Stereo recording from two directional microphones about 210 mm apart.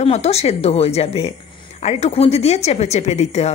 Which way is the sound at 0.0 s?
30° left (ahead or behind).